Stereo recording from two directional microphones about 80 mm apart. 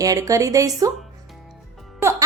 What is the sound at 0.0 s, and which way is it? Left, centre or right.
Speech, right.